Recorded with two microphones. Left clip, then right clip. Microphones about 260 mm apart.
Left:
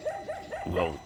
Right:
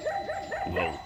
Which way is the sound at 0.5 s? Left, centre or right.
Left.